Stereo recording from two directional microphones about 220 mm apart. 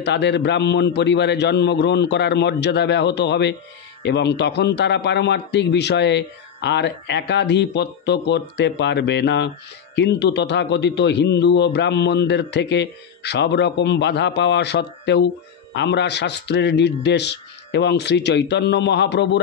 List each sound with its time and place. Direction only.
0.0 s a man's voice: 50° left (ahead or behind)